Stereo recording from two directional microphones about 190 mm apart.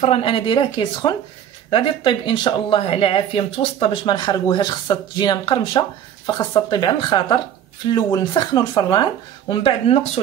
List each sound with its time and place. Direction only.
0.0 s speech: 30° left (ahead or behind)